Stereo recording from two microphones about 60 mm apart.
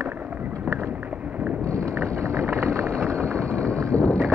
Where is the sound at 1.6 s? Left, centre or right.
Right.